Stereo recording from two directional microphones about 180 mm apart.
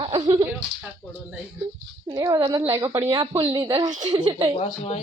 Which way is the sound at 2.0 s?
20° right (ahead or behind).